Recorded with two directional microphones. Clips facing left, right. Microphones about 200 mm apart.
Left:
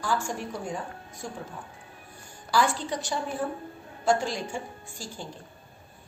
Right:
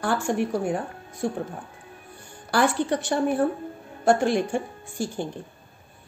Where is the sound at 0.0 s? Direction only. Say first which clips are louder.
Right 6 dB; 65° right (ahead or behind).